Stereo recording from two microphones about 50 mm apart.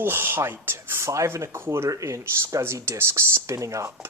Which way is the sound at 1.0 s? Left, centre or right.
Right.